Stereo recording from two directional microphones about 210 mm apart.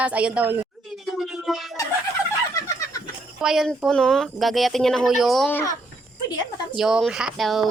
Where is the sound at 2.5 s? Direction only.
15° left (ahead or behind).